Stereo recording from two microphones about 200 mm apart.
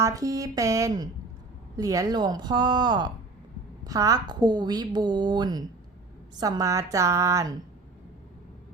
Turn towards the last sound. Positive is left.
turn(degrees=-15)  # may be behind; listen again after turning